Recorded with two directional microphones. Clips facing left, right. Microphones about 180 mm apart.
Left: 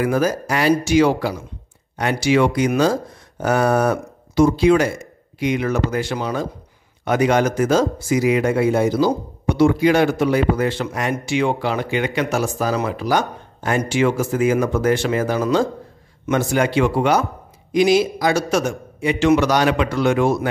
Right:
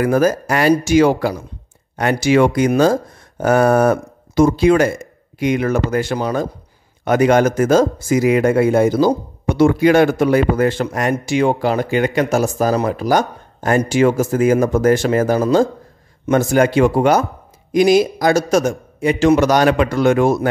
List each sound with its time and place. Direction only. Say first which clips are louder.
0.0 s speech: right 4 dB; 50° right (ahead or behind)